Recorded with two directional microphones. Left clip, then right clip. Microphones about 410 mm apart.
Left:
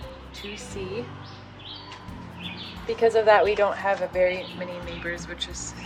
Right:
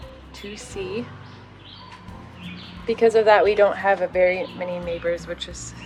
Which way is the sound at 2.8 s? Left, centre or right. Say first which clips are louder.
Right 3 dB; centre.